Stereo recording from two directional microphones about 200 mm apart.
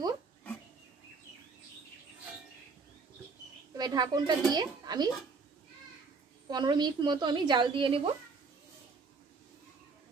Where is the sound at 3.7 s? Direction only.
20° right (ahead or behind).